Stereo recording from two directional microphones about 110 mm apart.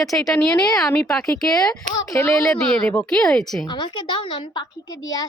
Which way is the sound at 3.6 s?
45° left (ahead or behind).